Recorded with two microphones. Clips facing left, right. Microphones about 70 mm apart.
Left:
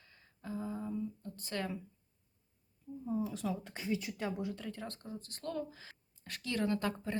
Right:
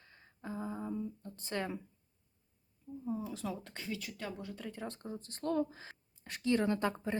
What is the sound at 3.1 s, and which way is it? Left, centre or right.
Speech, centre.